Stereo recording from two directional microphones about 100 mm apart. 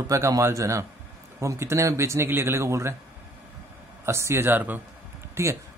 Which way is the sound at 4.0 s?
25° right (ahead or behind).